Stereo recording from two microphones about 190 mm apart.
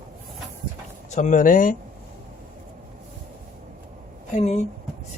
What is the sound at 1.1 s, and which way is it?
Speech, 40° left (ahead or behind).